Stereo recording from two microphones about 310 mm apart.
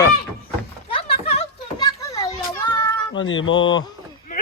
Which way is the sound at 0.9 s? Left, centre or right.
Centre.